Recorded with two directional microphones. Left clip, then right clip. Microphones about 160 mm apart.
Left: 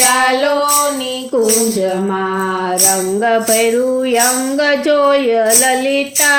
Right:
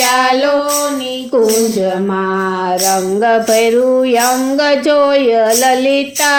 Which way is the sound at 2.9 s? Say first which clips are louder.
Right 2 dB; 30° right (ahead or behind).